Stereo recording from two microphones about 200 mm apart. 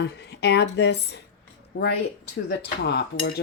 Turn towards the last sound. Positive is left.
turn(degrees=55)  # may be behind; listen again after turning